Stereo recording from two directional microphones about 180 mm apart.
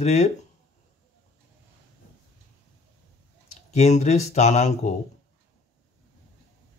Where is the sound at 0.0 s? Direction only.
40° left (ahead or behind).